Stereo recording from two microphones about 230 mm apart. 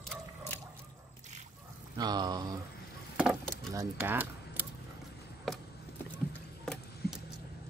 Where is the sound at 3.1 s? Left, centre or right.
Centre.